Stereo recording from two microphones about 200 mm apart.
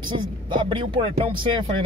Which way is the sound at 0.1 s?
25° right (ahead or behind).